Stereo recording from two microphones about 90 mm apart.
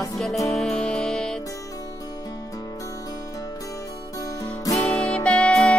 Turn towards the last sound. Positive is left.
turn(degrees=10)  # may be behind; listen again after turning